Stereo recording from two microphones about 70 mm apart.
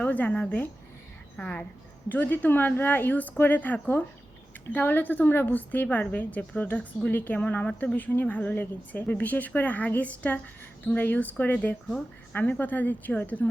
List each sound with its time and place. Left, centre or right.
0.0 s a woman's voice: left
7.9 s a woman's voice: left